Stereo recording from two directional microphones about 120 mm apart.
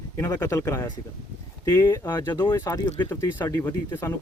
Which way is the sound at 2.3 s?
35° left (ahead or behind).